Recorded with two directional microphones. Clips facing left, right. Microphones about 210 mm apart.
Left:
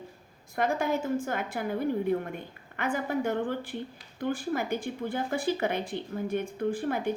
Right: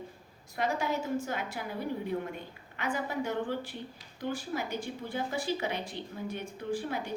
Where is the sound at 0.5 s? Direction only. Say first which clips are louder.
Left 4 dB; 50° left (ahead or behind).